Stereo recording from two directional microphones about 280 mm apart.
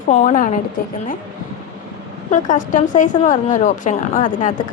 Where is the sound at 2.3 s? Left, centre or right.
Left.